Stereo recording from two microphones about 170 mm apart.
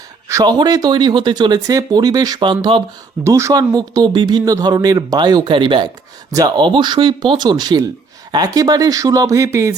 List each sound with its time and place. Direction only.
0.3 s speech: 20° right (ahead or behind)
3.2 s speech: 15° right (ahead or behind)